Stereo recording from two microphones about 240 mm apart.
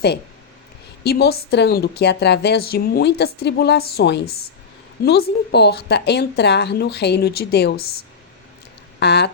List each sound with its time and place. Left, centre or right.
1.0 s a woman's voice: left
9.0 s speech: left